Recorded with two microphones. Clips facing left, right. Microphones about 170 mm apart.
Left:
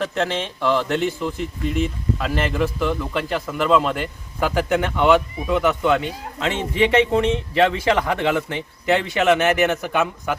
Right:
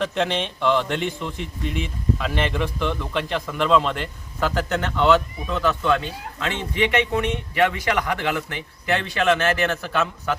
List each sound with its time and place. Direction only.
0.0 s speech: 5° left (ahead or behind)